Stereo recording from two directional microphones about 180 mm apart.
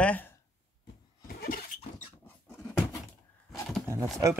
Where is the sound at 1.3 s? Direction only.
55° left (ahead or behind).